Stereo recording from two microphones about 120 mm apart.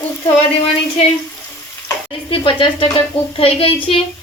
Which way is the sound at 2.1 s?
45° left (ahead or behind).